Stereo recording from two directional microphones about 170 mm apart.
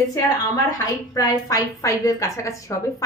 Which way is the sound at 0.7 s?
20° left (ahead or behind).